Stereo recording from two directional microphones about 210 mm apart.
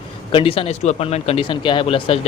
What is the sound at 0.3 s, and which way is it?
Speech, 25° left (ahead or behind).